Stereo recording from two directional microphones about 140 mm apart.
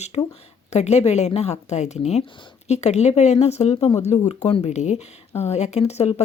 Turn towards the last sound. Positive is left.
turn(degrees=50)  # may be behind; listen again after turning